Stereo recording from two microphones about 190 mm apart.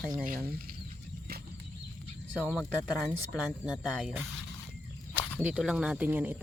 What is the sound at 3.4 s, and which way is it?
Speech, 5° right (ahead or behind).